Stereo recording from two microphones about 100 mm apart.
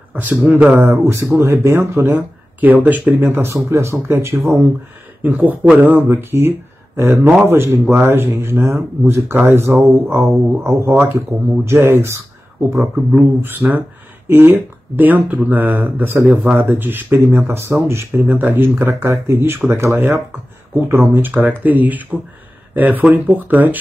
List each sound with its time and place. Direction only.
0.1 s speech: 15° right (ahead or behind)